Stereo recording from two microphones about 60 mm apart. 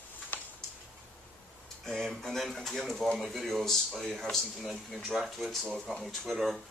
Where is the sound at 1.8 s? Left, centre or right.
Centre.